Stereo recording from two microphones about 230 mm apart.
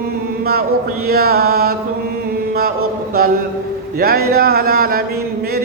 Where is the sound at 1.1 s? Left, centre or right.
Right.